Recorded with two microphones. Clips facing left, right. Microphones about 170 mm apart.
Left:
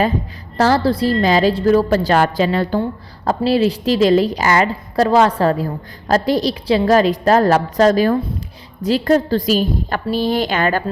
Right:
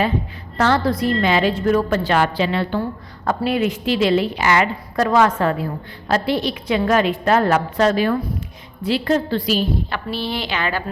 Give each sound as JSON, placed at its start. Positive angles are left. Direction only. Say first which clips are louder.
{"t": 0.5, "sound": "a woman's voice", "louder": "left 3 dB", "side_deg": 35}